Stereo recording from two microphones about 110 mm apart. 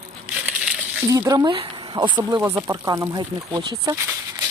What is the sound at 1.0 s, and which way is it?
Speech, 30° right (ahead or behind).